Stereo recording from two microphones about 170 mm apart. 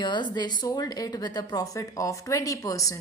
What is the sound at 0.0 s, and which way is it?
A woman's voice, 25° left (ahead or behind).